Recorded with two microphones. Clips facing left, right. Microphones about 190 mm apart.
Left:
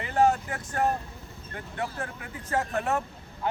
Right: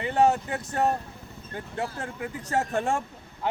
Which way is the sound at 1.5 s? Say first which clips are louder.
Right 1 dB; 30° right (ahead or behind).